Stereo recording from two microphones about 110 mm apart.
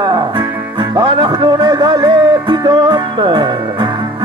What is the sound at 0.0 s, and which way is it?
Music, 45° right (ahead or behind).